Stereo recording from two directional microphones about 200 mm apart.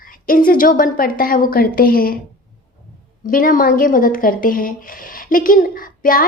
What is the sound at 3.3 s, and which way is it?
A woman's voice, 45° left (ahead or behind).